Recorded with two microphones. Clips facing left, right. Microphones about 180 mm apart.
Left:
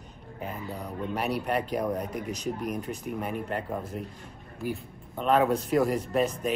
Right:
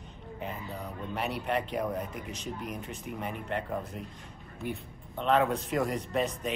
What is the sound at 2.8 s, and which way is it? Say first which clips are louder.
Speech: left 5 dB; centre (ahead or behind).